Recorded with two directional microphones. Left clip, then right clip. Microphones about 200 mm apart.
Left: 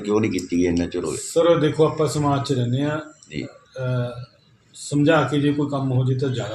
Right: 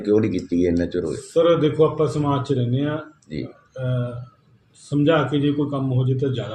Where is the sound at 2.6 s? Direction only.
Centre (ahead or behind).